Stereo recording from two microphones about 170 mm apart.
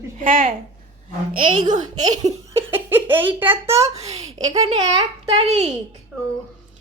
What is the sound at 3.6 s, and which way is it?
A child's voice, 15° right (ahead or behind).